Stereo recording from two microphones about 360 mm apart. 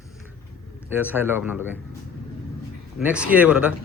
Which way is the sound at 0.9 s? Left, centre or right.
Centre.